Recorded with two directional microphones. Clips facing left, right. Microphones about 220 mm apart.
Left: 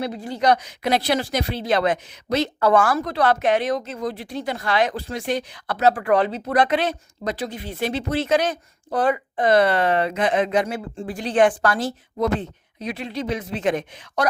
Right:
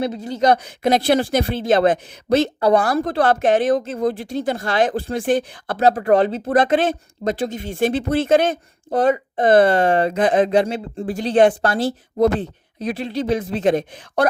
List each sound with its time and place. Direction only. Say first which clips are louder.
0.0 s a woman's voice: right 4 dB; 25° right (ahead or behind)
0.3 s speech: right 3 dB; 45° right (ahead or behind)
8.4 s speech: right 4 dB; 25° right (ahead or behind)
9.4 s a woman's voice: right 4 dB; 50° right (ahead or behind); by 10.8 s 30° right (ahead or behind)
10.9 s speech: right 5 dB; 45° right (ahead or behind)
11.2 s a woman's voice: right 3 dB; 25° right (ahead or behind)